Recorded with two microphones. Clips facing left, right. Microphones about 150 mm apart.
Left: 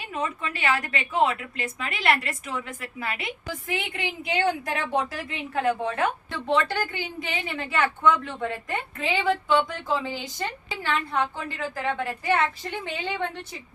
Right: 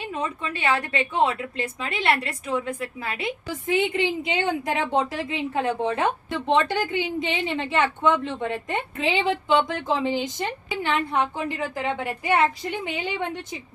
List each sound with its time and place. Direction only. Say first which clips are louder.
0.1 s a woman's voice: left 2 dB; 25° right (ahead or behind)